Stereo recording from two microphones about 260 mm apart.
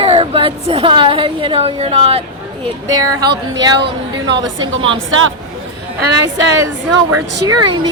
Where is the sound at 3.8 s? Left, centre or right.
Right.